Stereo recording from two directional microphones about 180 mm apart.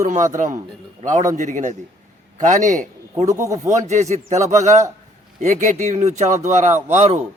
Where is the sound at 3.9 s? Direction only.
40° right (ahead or behind).